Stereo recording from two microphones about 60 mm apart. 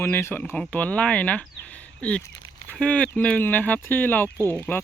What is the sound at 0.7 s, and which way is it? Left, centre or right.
Speech, left.